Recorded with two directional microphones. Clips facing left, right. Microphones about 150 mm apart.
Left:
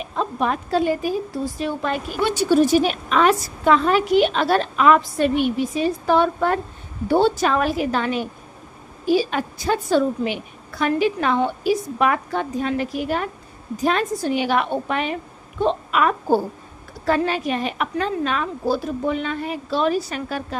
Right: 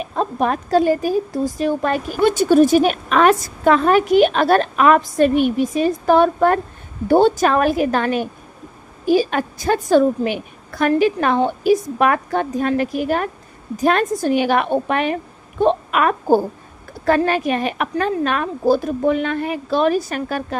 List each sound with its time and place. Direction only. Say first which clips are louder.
0.0 s a woman's voice: right 3 dB; 45° right (ahead or behind)